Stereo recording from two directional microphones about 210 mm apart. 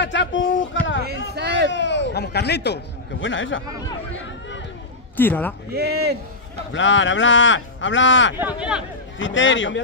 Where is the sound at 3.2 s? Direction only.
65° left (ahead or behind).